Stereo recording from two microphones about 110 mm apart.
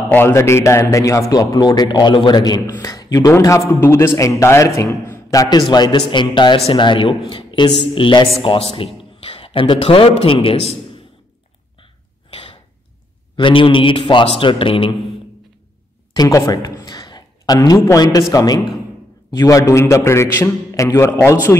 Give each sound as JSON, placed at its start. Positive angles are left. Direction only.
{"t": 0.1, "sound": "a man's voice", "side_deg": 20}
{"t": 8.4, "sound": "a man's voice", "side_deg": 60}
{"t": 11.8, "sound": "sneeze", "side_deg": 50}
{"t": 13.4, "sound": "a man's voice", "side_deg": 50}
{"t": 16.2, "sound": "a sound", "side_deg": 30}
{"t": 17.9, "sound": "a man's voice", "side_deg": 35}